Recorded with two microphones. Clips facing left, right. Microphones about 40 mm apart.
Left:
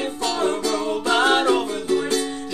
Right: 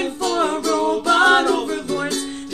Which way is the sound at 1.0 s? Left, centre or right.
Centre.